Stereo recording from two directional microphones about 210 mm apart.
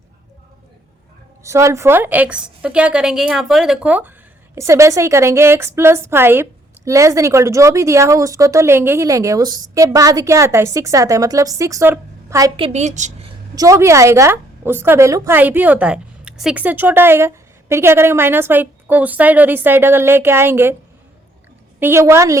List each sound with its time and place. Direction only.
1.5 s a woman's voice: 15° right (ahead or behind)
12.5 s speech: 30° right (ahead or behind)
13.6 s a woman's voice: 15° right (ahead or behind)
21.8 s a woman's voice: 10° right (ahead or behind)